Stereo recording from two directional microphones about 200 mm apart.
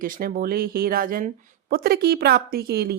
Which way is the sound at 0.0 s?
45° right (ahead or behind).